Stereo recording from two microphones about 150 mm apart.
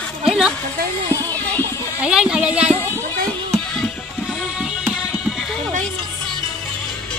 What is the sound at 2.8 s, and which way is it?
Speech, 15° left (ahead or behind).